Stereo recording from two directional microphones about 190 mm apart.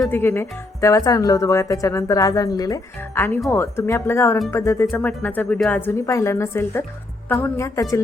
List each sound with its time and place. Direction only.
0.1 s speech: 10° left (ahead or behind)